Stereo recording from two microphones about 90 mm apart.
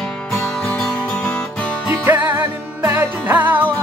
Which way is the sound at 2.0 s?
25° right (ahead or behind).